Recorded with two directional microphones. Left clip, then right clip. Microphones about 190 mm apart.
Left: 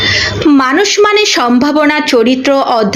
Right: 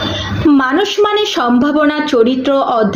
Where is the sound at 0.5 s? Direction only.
20° left (ahead or behind).